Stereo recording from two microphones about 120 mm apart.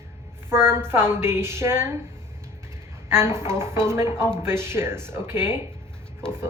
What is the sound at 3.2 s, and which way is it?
Speech, 20° right (ahead or behind).